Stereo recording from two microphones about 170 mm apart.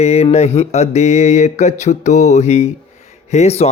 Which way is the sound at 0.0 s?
40° left (ahead or behind).